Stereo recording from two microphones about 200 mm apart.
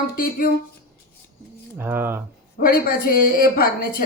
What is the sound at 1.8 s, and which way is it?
Speech, 10° right (ahead or behind).